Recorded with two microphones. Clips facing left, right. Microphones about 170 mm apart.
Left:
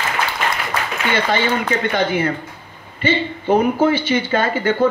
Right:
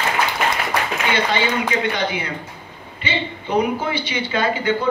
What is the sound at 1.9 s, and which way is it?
Speech, 50° left (ahead or behind).